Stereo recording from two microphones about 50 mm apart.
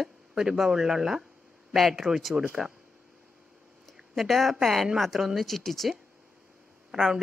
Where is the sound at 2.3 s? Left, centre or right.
Right.